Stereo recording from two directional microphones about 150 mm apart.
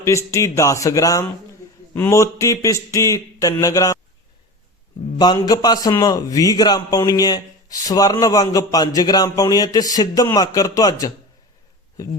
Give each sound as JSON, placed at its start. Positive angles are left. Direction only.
{"t": 0.0, "sound": "a man's voice", "side_deg": 20}
{"t": 5.1, "sound": "a man's voice", "side_deg": 30}